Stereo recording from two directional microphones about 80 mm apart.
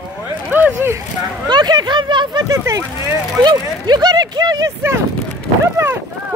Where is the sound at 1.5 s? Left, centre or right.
Right.